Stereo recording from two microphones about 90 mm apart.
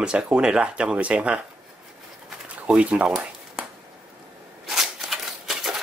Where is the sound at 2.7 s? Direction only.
15° right (ahead or behind).